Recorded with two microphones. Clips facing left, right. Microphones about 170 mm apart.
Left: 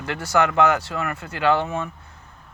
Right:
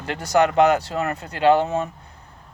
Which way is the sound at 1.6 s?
40° right (ahead or behind).